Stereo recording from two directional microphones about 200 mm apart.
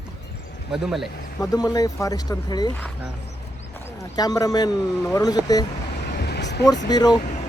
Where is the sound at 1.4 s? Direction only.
20° left (ahead or behind).